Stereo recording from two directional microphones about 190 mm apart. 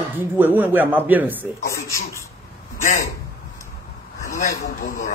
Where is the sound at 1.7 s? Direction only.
15° left (ahead or behind).